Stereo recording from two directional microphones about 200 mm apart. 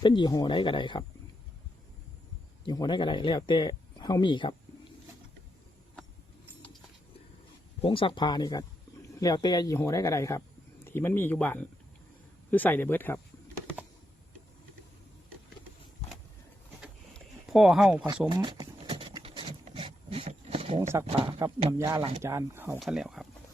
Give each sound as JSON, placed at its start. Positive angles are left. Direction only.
{"t": 0.0, "sound": "speech", "side_deg": 20}
{"t": 2.6, "sound": "speech", "side_deg": 20}
{"t": 7.8, "sound": "speech", "side_deg": 25}
{"t": 16.8, "sound": "a sound", "side_deg": 0}
{"t": 18.3, "sound": "a sound", "side_deg": -20}
{"t": 21.7, "sound": "speech", "side_deg": -15}